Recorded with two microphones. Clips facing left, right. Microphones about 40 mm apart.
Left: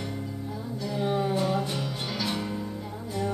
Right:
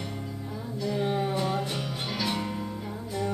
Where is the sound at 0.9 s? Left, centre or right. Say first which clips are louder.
Left 2 dB; centre.